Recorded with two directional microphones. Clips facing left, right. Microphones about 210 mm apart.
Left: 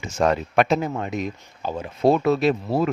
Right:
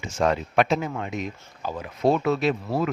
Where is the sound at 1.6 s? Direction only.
30° left (ahead or behind).